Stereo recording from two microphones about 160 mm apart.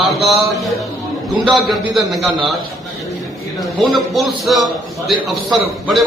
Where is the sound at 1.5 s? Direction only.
Centre (ahead or behind).